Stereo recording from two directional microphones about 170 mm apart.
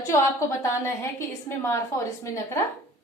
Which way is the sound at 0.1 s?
15° left (ahead or behind).